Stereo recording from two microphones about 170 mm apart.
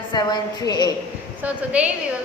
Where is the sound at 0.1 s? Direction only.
25° left (ahead or behind).